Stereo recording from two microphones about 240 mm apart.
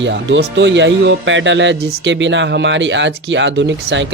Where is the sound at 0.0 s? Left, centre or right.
Right.